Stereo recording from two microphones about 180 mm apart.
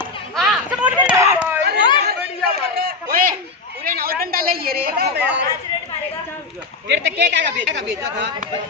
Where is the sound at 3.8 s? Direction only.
55° right (ahead or behind).